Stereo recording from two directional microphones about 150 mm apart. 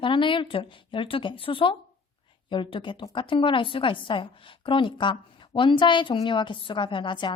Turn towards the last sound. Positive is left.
turn(degrees=30)  # may be behind; listen again after turning